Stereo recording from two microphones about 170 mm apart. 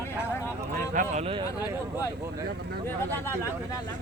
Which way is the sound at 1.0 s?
40° right (ahead or behind).